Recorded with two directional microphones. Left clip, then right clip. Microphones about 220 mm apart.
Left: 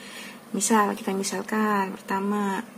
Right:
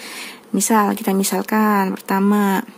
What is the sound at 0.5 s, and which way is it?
Speech, 45° right (ahead or behind).